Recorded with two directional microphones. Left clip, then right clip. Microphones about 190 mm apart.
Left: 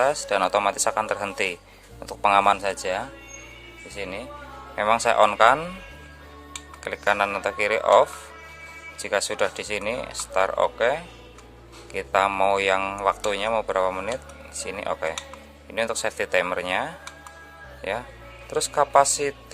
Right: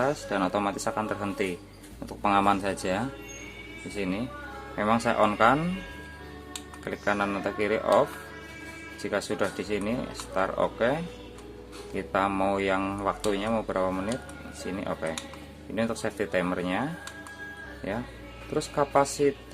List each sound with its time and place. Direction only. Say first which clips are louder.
0.0 s speech: left 6 dB; 40° left (ahead or behind)
4.7 s speech: left 5 dB; 35° left (ahead or behind)
6.8 s speech: left 5 dB; 40° left (ahead or behind)